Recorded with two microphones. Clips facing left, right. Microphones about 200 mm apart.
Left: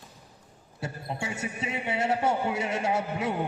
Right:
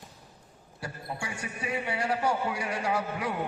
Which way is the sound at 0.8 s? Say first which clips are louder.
Left 3 dB; 25° left (ahead or behind).